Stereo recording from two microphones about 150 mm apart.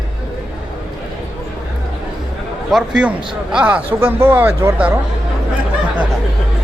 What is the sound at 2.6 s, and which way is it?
A man's voice, centre (ahead or behind).